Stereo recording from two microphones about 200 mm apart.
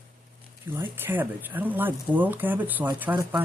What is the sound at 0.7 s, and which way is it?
Speech, 10° right (ahead or behind).